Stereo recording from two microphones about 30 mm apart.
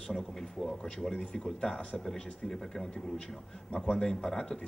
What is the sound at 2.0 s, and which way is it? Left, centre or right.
Speech, centre.